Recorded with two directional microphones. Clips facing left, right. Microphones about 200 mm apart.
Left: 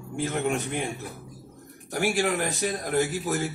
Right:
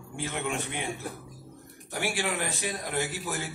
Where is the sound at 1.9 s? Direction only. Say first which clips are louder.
Left 6 dB; 40° left (ahead or behind).